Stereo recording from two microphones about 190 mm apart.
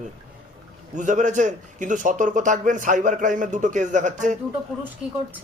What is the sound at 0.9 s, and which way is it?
Speech, 40° right (ahead or behind).